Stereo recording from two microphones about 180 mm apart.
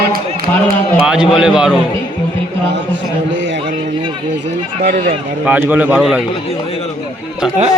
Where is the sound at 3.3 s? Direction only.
90° right.